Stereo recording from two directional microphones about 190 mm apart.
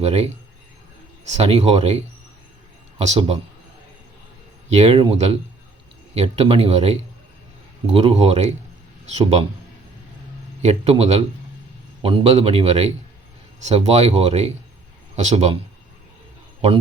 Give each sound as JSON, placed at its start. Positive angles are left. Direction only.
{"t": 0.0, "sound": "speech", "side_deg": -35}
{"t": 1.3, "sound": "speech", "side_deg": -35}
{"t": 4.7, "sound": "speech", "side_deg": -35}
{"t": 10.6, "sound": "speech", "side_deg": -35}